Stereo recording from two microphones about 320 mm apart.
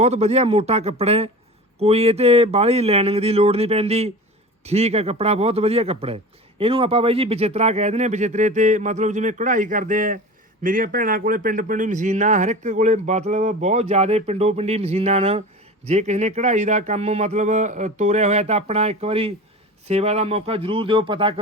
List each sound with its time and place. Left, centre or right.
0.0 s speech: centre